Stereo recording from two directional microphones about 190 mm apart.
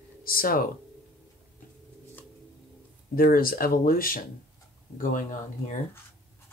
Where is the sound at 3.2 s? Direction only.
50° left (ahead or behind).